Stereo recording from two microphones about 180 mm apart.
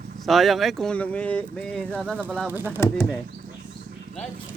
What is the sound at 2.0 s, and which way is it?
Speech, 10° right (ahead or behind).